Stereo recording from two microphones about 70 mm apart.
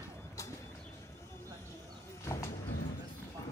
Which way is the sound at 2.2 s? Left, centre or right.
Left.